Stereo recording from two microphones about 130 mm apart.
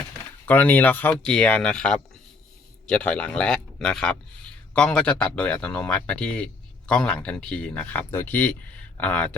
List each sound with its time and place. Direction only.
0.4 s speech: 15° left (ahead or behind)